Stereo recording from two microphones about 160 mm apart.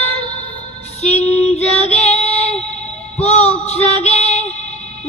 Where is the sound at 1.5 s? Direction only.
45° left (ahead or behind).